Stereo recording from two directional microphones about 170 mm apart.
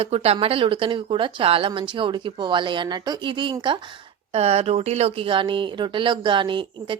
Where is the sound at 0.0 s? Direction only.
35° right (ahead or behind).